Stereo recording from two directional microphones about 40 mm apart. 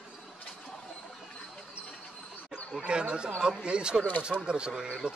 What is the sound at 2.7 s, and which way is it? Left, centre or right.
Speech, right.